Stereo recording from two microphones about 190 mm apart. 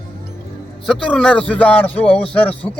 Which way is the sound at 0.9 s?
5° left (ahead or behind).